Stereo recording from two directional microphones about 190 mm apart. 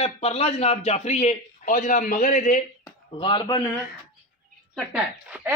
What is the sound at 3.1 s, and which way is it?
Speech, 25° left (ahead or behind).